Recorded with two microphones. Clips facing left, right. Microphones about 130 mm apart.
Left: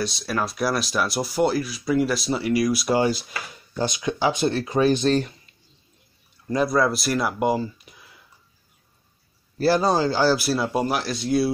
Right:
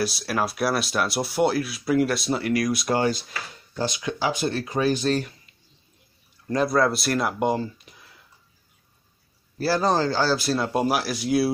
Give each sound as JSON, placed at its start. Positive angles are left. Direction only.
{"t": 0.0, "sound": "speech", "side_deg": -5}
{"t": 6.5, "sound": "speech", "side_deg": 0}
{"t": 9.6, "sound": "speech", "side_deg": 15}